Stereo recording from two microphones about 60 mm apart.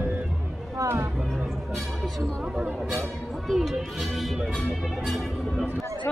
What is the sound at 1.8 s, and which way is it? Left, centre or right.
Speech, centre.